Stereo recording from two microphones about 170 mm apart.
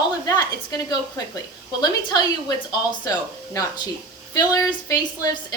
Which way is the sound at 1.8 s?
25° left (ahead or behind).